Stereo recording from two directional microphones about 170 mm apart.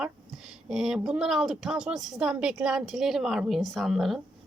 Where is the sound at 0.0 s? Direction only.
Centre (ahead or behind).